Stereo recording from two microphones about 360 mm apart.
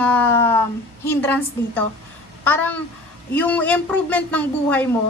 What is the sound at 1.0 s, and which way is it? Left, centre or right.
A woman's voice, centre.